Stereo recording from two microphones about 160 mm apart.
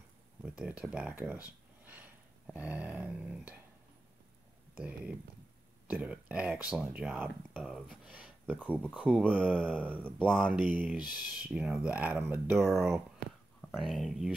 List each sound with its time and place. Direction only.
0.4 s speech: 10° right (ahead or behind)
4.7 s speech: 10° right (ahead or behind)
13.6 s speech: centre (ahead or behind)